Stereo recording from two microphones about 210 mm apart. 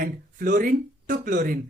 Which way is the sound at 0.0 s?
40° right (ahead or behind).